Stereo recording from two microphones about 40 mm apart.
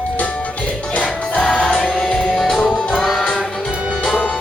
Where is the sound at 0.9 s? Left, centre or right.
Left.